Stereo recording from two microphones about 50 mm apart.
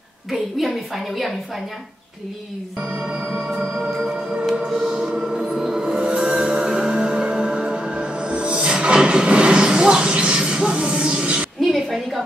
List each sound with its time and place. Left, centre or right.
0.3 s a woman's voice: centre
3.3 s music: centre
4.6 s music: centre
5.9 s music: right
11.7 s a sound: centre